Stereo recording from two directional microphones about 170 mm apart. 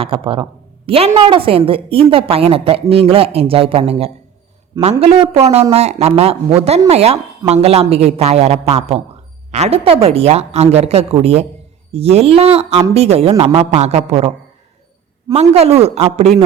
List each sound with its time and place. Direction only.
0.0 s speech: 30° right (ahead or behind)